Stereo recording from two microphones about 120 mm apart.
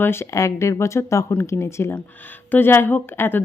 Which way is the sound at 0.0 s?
20° left (ahead or behind).